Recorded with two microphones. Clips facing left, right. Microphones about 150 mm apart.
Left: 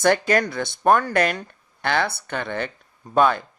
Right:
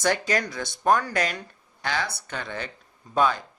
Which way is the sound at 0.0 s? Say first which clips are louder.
Left 6 dB; 55° left (ahead or behind).